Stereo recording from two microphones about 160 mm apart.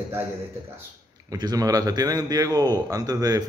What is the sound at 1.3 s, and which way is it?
Speech, 25° right (ahead or behind).